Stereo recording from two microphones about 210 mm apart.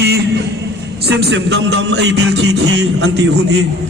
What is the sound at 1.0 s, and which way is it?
Music, 50° right (ahead or behind).